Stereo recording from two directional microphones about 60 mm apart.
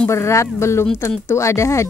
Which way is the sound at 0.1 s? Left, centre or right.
Left.